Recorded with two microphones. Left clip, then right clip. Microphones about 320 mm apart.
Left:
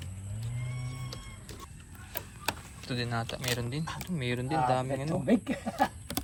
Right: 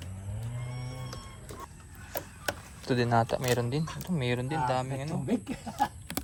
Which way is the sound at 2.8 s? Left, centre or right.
Right.